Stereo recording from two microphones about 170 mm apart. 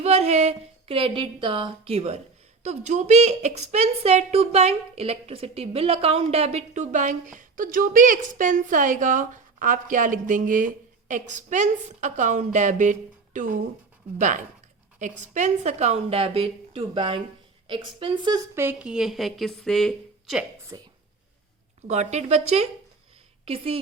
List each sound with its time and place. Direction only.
0.0 s a woman's voice: 40° right (ahead or behind); by 20.4 s centre (ahead or behind)
20.7 s speech: 20° right (ahead or behind)
21.8 s a woman's voice: 40° right (ahead or behind)